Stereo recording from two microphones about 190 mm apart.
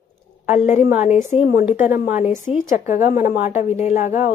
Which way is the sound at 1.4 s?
45° left (ahead or behind).